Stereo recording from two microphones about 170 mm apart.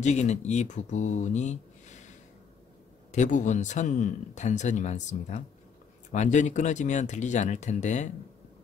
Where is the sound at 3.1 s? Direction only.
45° left (ahead or behind).